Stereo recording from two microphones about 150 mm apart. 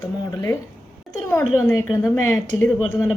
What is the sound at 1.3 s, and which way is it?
Speech, 15° left (ahead or behind).